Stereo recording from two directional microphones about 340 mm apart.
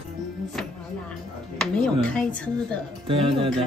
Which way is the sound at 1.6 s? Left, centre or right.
Centre.